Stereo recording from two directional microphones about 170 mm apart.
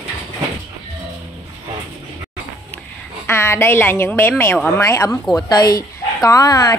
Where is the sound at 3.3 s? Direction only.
15° left (ahead or behind).